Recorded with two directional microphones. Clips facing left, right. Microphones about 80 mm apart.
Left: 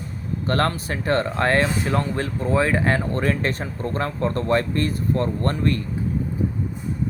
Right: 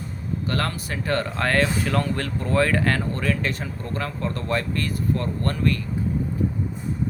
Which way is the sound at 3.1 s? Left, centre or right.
Left.